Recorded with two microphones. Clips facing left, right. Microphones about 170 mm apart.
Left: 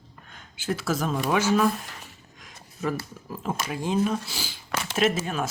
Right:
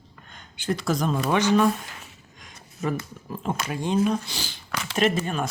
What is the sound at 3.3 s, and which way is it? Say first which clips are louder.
Speech: right 1 dB; 5° left (ahead or behind).